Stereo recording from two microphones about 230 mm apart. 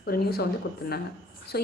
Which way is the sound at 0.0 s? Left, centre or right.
Left.